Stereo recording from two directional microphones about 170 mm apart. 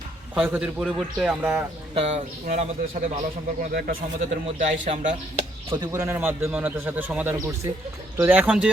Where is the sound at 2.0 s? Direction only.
40° right (ahead or behind).